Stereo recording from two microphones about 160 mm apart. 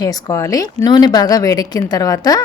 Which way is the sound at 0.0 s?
20° left (ahead or behind).